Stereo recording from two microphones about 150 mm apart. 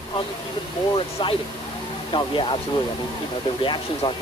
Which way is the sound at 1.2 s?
35° left (ahead or behind).